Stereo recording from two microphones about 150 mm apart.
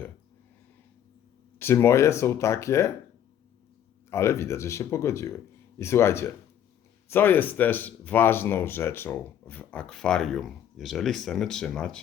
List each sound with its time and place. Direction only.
1.5 s speech: 15° left (ahead or behind)
4.1 s speech: 20° left (ahead or behind)